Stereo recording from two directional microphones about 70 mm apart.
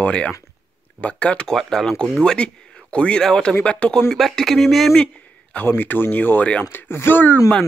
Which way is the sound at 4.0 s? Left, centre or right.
Centre.